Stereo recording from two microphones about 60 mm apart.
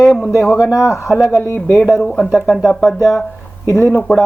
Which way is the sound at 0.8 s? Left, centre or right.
Left.